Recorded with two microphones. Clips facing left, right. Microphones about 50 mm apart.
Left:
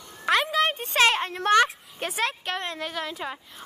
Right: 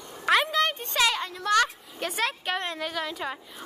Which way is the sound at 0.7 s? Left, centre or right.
Left.